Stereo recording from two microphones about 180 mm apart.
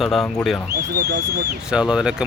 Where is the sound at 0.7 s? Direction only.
60° right (ahead or behind).